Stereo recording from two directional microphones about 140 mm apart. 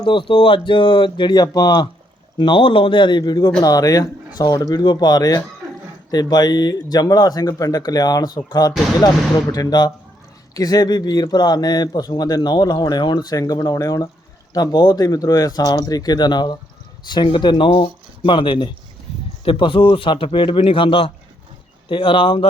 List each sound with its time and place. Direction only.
0.0 s speech: 35° left (ahead or behind)